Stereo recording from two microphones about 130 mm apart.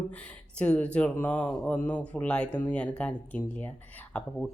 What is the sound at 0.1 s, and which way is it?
Speech, 10° left (ahead or behind).